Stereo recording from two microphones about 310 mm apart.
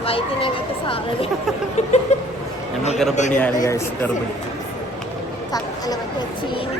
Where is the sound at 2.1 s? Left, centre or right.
Left.